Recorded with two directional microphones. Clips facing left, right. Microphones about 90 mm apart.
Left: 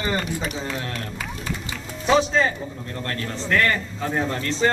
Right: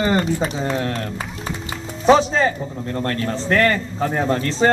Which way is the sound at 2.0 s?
35° right (ahead or behind).